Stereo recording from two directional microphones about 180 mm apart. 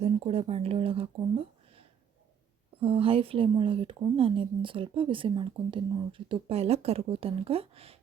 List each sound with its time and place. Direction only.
0.0 s speech: 35° right (ahead or behind)
2.8 s a woman's voice: 30° right (ahead or behind)